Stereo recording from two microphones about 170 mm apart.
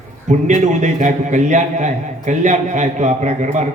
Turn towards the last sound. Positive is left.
turn(degrees=-45)  # may be behind; listen again after turning